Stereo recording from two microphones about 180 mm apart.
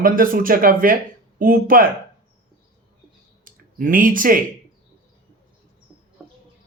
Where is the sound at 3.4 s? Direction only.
50° right (ahead or behind).